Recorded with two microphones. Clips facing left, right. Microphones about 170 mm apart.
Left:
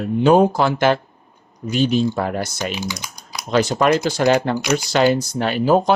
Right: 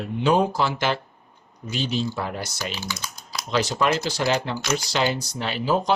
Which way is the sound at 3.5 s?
50° left (ahead or behind).